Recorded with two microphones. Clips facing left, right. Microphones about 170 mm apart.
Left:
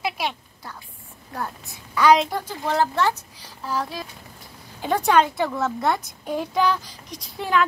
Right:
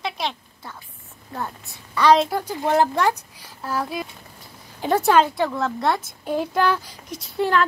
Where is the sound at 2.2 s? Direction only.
10° right (ahead or behind).